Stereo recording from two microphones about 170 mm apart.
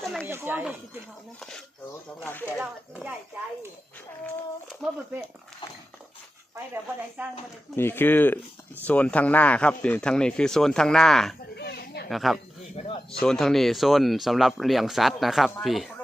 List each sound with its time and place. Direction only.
0.0 s a sound: centre (ahead or behind)
0.3 s speech: 15° right (ahead or behind)
1.4 s speech: 5° left (ahead or behind)
2.6 s speech: 5° right (ahead or behind)
4.8 s speech: centre (ahead or behind)
7.2 s speech: 10° right (ahead or behind)
7.8 s speech: 15° left (ahead or behind)
11.5 s children playing: 70° left (ahead or behind)
12.0 s speech: centre (ahead or behind)